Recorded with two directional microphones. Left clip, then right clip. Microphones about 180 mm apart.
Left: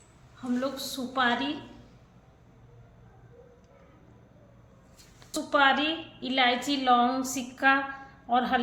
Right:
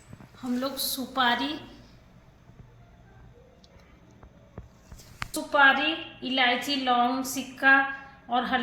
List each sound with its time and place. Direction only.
0.4 s a woman's voice: 10° left (ahead or behind)
5.3 s a sound: 15° left (ahead or behind)
6.1 s a woman's voice: 15° left (ahead or behind)